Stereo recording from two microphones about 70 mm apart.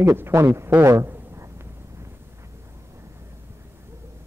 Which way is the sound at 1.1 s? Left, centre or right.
Right.